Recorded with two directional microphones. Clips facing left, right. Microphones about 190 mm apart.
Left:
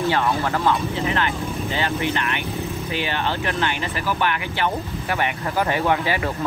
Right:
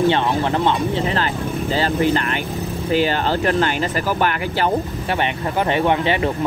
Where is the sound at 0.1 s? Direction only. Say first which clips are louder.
Right 3 dB; 25° right (ahead or behind); by 4.7 s 40° right (ahead or behind).